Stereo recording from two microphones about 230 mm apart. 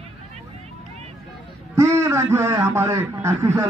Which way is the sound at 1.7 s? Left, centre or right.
Centre.